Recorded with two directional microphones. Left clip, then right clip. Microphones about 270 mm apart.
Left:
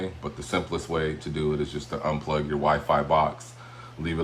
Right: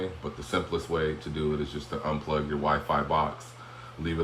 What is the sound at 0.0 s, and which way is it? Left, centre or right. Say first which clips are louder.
Speech: left 1 dB; left.